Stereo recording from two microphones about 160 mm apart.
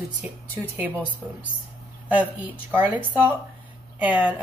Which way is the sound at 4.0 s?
10° right (ahead or behind).